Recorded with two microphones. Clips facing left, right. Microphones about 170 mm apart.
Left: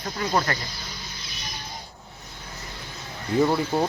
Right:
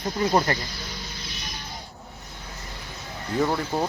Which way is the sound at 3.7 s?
5° left (ahead or behind).